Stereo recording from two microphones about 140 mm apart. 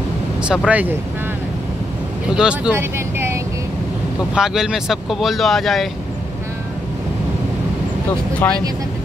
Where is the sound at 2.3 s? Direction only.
5° right (ahead or behind).